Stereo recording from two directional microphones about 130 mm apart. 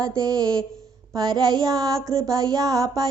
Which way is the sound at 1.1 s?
30° right (ahead or behind).